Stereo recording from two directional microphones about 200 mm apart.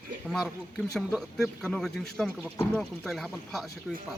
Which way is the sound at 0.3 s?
Centre (ahead or behind).